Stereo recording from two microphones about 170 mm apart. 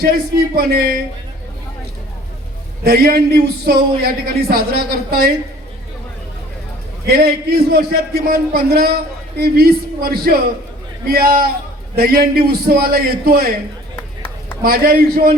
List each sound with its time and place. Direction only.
0.0 s a man's voice: 65° right (ahead or behind)
2.8 s a man's voice: 60° right (ahead or behind)
7.1 s a man's voice: 65° right (ahead or behind)
13.9 s a sound: 10° left (ahead or behind)
14.6 s a man's voice: 60° right (ahead or behind)